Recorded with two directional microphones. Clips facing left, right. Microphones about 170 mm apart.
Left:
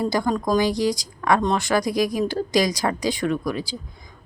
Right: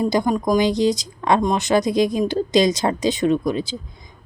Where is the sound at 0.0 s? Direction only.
20° right (ahead or behind).